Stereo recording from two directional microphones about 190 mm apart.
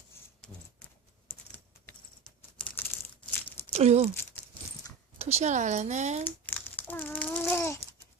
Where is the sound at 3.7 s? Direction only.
35° right (ahead or behind).